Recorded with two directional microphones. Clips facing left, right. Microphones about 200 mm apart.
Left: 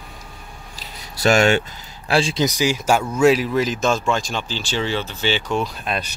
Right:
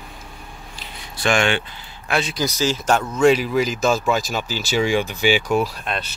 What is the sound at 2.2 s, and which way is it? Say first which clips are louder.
Speech: left 3 dB; 25° left (ahead or behind).